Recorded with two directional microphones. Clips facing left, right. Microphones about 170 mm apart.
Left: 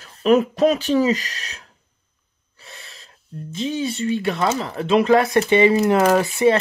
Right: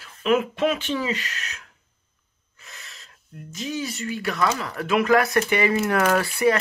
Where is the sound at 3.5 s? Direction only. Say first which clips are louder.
Left 6 dB; 30° left (ahead or behind).